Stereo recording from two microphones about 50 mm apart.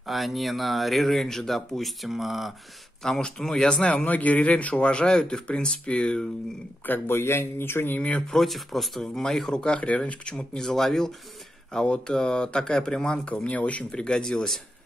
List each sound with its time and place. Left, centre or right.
0.0 s speech: centre
3.0 s a man's voice: centre
6.9 s a man's voice: left
8.3 s speech: centre
9.5 s a man's voice: centre
10.3 s speech: centre
11.7 s speech: centre
13.5 s a man's voice: left
13.9 s speech: centre